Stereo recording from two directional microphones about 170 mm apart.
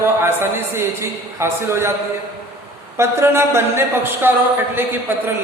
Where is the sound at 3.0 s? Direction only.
15° right (ahead or behind).